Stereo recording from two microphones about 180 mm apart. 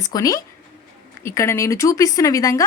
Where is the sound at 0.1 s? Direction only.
20° left (ahead or behind).